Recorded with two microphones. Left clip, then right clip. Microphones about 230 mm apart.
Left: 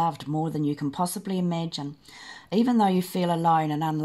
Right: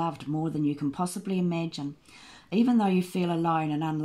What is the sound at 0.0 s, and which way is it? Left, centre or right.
Speech, left.